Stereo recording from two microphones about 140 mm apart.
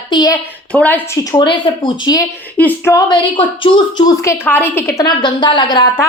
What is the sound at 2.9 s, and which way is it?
A woman's voice, 35° left (ahead or behind).